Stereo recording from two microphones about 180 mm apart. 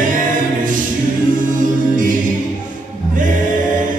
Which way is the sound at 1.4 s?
45° right (ahead or behind).